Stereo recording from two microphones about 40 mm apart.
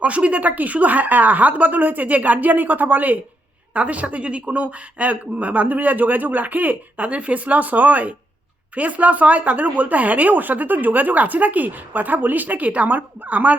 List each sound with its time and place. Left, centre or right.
0.0 s speech: right